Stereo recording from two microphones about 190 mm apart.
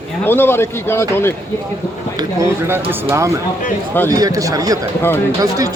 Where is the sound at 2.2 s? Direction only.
15° right (ahead or behind).